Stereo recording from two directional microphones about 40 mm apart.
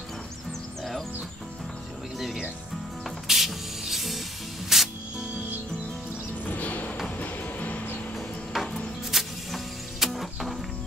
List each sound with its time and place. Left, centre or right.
2.1 s music: centre
3.3 s spray: centre
4.7 s music: centre
6.4 s music: left
8.5 s rub: centre
9.1 s music: centre